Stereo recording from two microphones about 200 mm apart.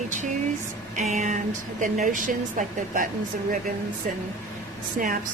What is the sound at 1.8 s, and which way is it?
A woman's voice, 40° right (ahead or behind).